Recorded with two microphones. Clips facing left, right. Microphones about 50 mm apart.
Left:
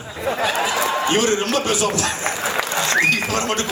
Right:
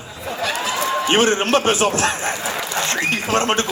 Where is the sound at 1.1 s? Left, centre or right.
Right.